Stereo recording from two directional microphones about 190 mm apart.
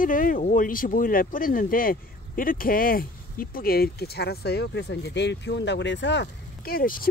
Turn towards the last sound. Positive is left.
turn(degrees=50)  # may be behind; listen again after turning